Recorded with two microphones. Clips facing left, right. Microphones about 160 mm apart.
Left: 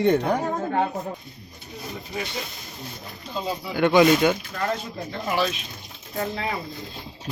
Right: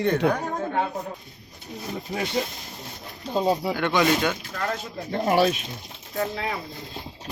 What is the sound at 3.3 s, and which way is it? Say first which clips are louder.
Speech: right 7 dB; 50° right (ahead or behind).